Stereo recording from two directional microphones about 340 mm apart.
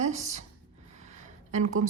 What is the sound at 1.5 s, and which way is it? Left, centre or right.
Speech, right.